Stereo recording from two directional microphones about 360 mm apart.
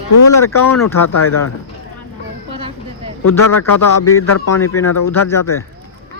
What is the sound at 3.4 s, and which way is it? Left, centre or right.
A man's voice, left.